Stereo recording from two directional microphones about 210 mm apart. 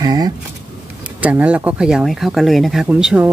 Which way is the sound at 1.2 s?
5° right (ahead or behind).